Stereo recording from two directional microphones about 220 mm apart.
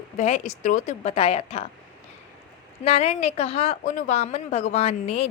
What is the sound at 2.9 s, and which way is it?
A woman's voice, 25° left (ahead or behind).